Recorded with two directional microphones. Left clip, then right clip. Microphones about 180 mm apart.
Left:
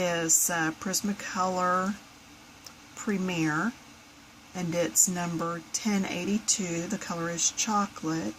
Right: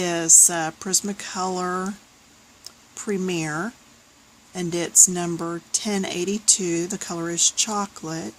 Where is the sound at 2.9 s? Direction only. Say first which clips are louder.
Right 5 dB; 45° right (ahead or behind).